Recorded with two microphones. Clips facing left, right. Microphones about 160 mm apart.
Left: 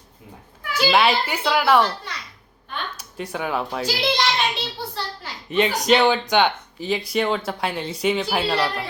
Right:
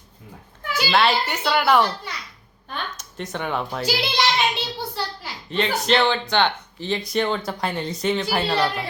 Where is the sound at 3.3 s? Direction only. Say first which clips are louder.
Left 1 dB; 5° left (ahead or behind).